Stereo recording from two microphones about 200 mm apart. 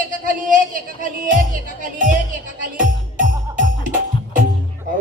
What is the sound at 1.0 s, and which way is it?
A woman's voice, 40° right (ahead or behind).